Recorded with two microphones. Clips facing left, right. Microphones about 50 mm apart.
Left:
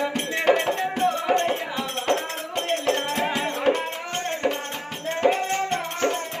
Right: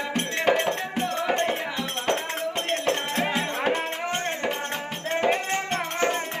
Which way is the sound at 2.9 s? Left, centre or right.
Centre.